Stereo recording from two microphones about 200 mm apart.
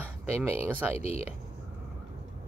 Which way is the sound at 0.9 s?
30° left (ahead or behind).